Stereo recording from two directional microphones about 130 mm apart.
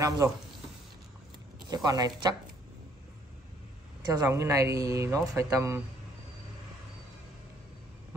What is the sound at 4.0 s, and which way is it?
Speech, 25° right (ahead or behind).